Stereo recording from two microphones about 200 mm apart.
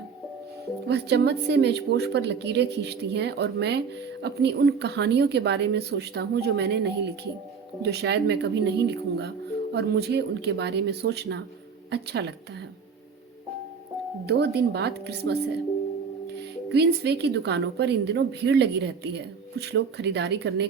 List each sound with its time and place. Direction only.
0.9 s a woman's voice: 55° right (ahead or behind)
14.3 s a woman's voice: 55° right (ahead or behind)
16.6 s a woman's voice: 55° right (ahead or behind)